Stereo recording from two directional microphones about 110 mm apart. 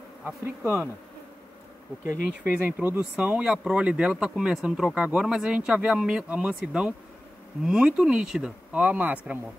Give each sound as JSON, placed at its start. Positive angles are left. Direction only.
{"t": 2.0, "sound": "speech", "side_deg": -20}